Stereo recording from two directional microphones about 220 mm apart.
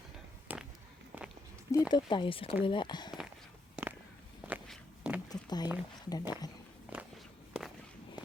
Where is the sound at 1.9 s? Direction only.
20° left (ahead or behind).